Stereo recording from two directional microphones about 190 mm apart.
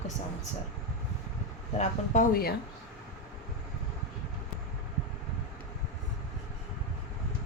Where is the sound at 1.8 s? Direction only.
45° left (ahead or behind).